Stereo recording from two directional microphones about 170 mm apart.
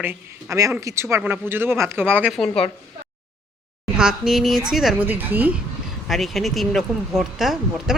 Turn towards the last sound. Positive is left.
turn(degrees=0)  # may be behind; listen again after turning